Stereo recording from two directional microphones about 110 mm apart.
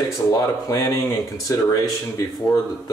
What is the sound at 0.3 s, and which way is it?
Speech, 35° left (ahead or behind).